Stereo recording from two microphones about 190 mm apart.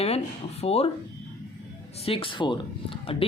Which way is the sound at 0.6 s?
30° left (ahead or behind).